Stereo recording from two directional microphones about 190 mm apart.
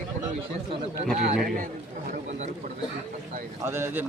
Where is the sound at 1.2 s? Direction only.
50° right (ahead or behind).